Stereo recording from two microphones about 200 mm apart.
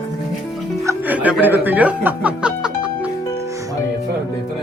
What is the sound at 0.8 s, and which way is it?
Music, 10° right (ahead or behind).